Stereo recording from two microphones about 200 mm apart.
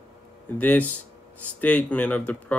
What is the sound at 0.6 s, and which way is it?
Speech, 10° left (ahead or behind).